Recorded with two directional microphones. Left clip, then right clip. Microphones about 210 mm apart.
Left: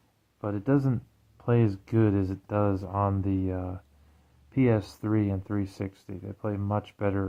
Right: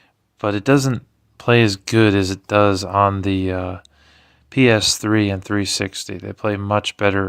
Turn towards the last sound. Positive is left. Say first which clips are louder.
# right 12 dB
turn(degrees=-25)  # may be behind; listen again after turning